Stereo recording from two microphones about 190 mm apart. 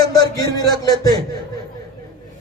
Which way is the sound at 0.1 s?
20° left (ahead or behind).